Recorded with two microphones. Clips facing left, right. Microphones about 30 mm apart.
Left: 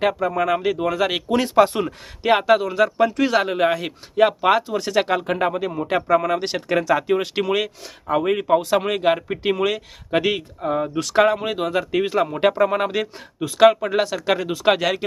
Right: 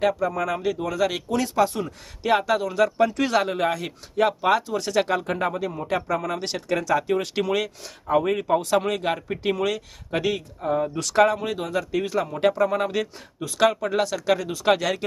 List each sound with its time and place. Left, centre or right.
0.0 s speech: left
2.2 s speech: left
11.3 s speech: left